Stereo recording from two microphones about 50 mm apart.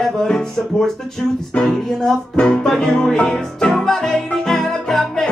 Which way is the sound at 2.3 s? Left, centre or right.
Centre.